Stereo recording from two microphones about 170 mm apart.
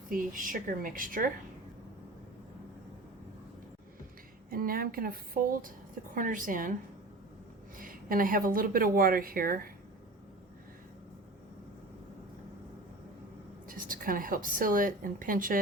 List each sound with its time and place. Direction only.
0.1 s a woman's voice: 55° right (ahead or behind)
4.4 s a woman's voice: 60° right (ahead or behind)
7.8 s speech: 55° right (ahead or behind)
13.7 s speech: 55° right (ahead or behind)